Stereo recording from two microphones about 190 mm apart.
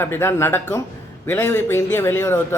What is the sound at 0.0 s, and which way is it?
A man's voice, 10° left (ahead or behind).